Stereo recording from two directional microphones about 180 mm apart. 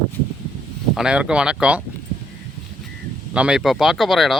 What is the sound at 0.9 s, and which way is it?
Speech, 5° right (ahead or behind).